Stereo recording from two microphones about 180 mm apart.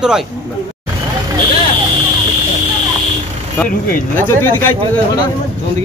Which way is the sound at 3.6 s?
55° left (ahead or behind).